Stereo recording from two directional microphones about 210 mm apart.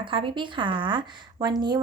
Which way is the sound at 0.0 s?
25° right (ahead or behind).